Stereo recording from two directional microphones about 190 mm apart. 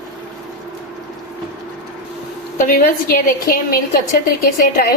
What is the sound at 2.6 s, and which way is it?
A woman's voice, 50° left (ahead or behind).